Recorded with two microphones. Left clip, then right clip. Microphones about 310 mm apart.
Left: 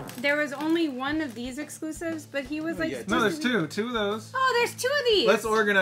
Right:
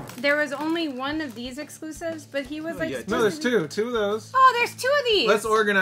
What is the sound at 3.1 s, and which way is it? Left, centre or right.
Speech, left.